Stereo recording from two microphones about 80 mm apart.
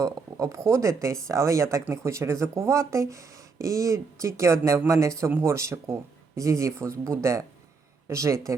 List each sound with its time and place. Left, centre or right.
0.0 s speech: right